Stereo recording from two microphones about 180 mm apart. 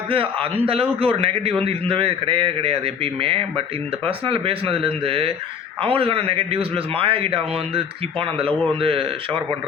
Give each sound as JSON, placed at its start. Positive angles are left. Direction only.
{"t": 0.1, "sound": "a man's voice", "side_deg": -30}